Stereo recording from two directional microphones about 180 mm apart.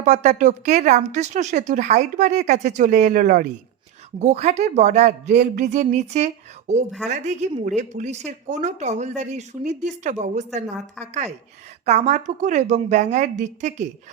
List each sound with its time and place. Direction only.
0.0 s speech: 40° right (ahead or behind)